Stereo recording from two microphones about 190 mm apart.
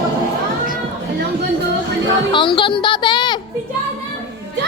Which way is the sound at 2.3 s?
25° left (ahead or behind).